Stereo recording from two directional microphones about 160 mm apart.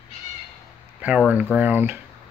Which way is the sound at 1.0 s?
5° right (ahead or behind).